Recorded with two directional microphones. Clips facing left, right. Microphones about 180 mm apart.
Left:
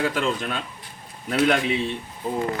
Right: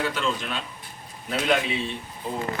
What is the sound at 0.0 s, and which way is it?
Speech, 45° left (ahead or behind).